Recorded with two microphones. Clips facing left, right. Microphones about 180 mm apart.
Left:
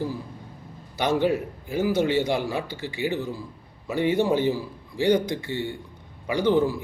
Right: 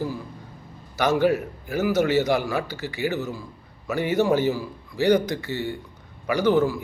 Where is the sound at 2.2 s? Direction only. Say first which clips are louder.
Right 2 dB; 25° left (ahead or behind).